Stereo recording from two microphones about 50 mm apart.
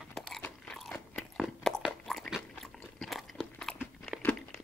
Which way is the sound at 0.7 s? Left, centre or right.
Centre.